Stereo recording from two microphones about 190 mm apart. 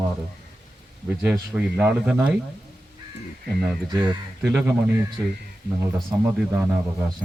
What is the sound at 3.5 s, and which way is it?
Speech, 5° right (ahead or behind).